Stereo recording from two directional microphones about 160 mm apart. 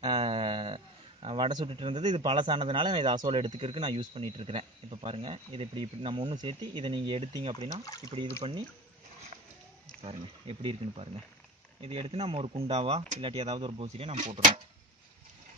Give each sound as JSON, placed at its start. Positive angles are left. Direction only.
{"t": 0.0, "sound": "speech", "side_deg": -30}
{"t": 7.8, "sound": "speech", "side_deg": 20}
{"t": 10.0, "sound": "speech", "side_deg": -35}